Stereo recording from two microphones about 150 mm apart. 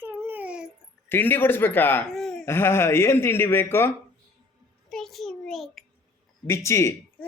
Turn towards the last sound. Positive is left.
turn(degrees=20)  # may be behind; listen again after turning